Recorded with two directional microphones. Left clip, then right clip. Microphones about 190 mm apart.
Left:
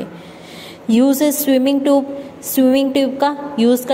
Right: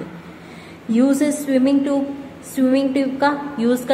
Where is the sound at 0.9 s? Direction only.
35° left (ahead or behind).